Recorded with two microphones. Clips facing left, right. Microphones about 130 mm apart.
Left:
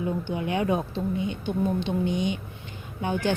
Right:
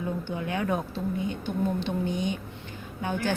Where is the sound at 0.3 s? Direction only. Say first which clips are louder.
Left 3 dB; 20° left (ahead or behind).